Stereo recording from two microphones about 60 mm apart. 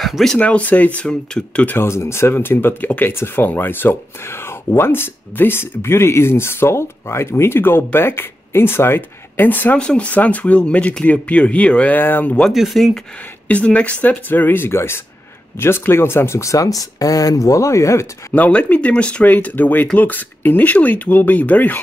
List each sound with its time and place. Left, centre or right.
0.0 s speech: centre
0.4 s speech: left
1.7 s speech: left
2.3 s speech: left
9.8 s speech: centre
12.4 s speech: centre
13.5 s speech: left
18.3 s speech: left
19.2 s speech: left